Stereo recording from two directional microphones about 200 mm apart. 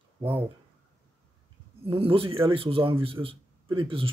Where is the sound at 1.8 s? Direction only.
25° right (ahead or behind).